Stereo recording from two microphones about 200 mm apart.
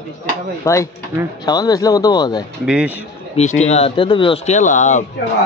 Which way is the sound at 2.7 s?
5° right (ahead or behind).